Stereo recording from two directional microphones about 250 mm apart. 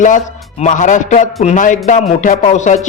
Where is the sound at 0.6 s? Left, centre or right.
Left.